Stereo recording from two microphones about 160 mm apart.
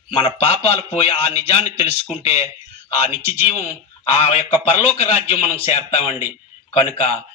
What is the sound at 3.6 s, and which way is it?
Speech, 40° left (ahead or behind).